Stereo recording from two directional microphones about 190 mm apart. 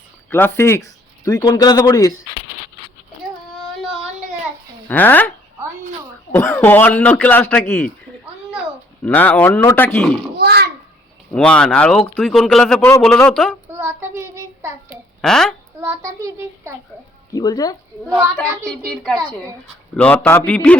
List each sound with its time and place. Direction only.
0.3 s speech: 10° left (ahead or behind)
4.9 s speech: 10° left (ahead or behind)
6.3 s speech: 10° left (ahead or behind)
8.2 s a sound: 5° right (ahead or behind)
9.0 s speech: 10° left (ahead or behind)
10.3 s a sound: 55° right (ahead or behind)
11.3 s speech: 5° left (ahead or behind)
13.7 s child singing: 10° right (ahead or behind)
15.2 s speech: 5° left (ahead or behind)
15.8 s a child's voice: 15° right (ahead or behind)
17.3 s speech: 20° left (ahead or behind)
18.0 s a child's voice: 10° right (ahead or behind)
18.9 s speech: 5° left (ahead or behind)